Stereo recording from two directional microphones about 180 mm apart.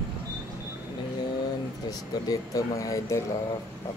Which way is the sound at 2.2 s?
20° left (ahead or behind).